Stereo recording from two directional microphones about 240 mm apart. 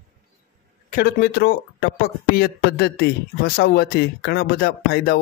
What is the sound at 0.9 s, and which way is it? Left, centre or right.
Speech, left.